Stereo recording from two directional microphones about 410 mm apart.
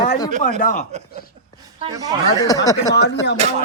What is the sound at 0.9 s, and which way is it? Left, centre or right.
Speech, centre.